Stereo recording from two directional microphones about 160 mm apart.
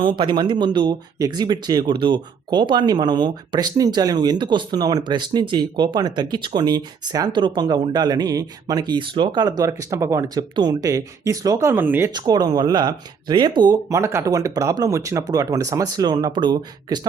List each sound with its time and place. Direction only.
0.0 s speech: 30° right (ahead or behind); by 12.1 s 15° right (ahead or behind)
12.1 s speech: 25° right (ahead or behind)